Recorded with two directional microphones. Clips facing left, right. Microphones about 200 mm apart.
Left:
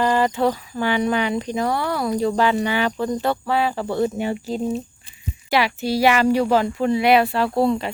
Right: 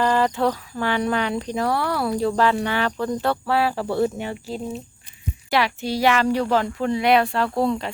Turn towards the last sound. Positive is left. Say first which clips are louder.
# left 2 dB
turn(degrees=5)  # may be behind; listen again after turning